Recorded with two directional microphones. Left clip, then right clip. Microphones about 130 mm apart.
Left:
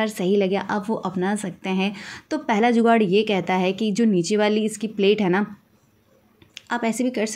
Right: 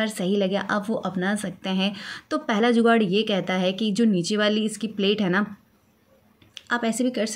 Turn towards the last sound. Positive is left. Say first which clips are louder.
# left 1 dB
turn(degrees=25)  # may be behind; listen again after turning